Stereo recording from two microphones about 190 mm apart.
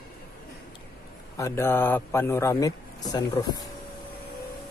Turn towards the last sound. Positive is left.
turn(degrees=20)  # may be behind; listen again after turning